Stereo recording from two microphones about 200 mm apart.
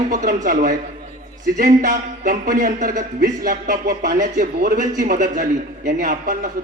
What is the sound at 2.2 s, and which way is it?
Speech, 40° right (ahead or behind).